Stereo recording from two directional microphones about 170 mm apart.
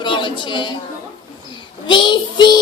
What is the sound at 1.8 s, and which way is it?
Child singing, 25° left (ahead or behind).